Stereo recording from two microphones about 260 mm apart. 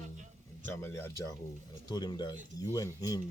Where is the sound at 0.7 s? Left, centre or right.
Centre.